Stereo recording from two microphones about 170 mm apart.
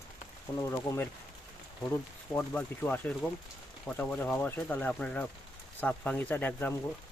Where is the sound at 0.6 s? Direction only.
15° left (ahead or behind).